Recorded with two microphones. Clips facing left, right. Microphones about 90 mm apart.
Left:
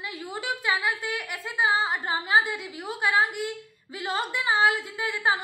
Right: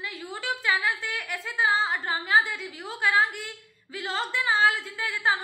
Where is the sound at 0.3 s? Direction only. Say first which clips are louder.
Even; 15° left (ahead or behind).